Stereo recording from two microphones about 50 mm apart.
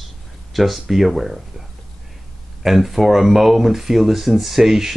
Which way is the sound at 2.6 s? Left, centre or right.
Centre.